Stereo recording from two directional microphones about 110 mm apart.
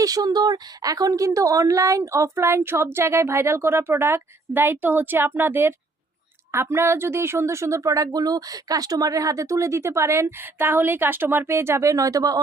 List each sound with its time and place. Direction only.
0.0 s speech: 35° right (ahead or behind)